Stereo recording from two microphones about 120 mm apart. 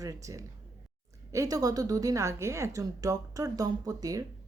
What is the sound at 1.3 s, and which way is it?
Speech, 30° right (ahead or behind).